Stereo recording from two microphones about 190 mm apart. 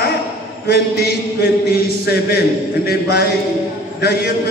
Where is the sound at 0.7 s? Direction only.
60° left (ahead or behind).